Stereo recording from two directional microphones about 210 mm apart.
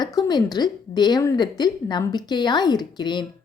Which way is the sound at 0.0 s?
20° left (ahead or behind).